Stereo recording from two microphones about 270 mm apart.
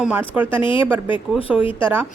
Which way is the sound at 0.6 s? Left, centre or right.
Centre.